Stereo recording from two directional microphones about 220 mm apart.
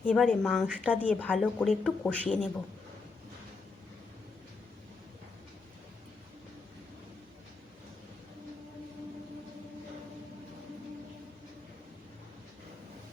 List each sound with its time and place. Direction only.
0.0 s speech: 5° left (ahead or behind)